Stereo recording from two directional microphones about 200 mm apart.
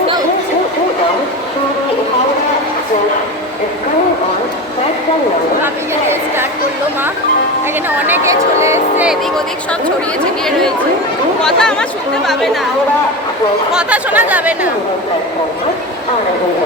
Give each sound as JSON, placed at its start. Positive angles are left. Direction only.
{"t": 5.6, "sound": "a sound", "side_deg": -10}
{"t": 7.9, "sound": "speech", "side_deg": -10}
{"t": 10.2, "sound": "speech", "side_deg": 5}
{"t": 13.7, "sound": "speech", "side_deg": -10}